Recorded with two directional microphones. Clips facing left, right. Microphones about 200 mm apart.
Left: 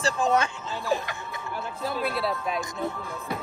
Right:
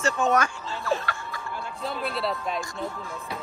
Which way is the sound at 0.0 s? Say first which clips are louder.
Right 1 dB; 30° left (ahead or behind).